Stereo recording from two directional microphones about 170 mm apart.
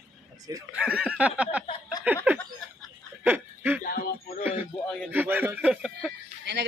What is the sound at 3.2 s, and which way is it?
Chuckle, 10° right (ahead or behind).